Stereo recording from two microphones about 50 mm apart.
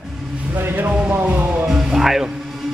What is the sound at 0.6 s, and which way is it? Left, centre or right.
Speech, right.